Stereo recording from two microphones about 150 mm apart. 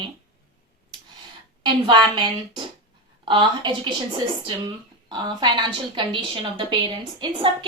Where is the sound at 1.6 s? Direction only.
30° right (ahead or behind).